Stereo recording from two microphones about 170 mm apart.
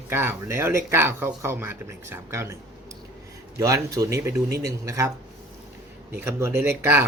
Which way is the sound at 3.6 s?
20° right (ahead or behind).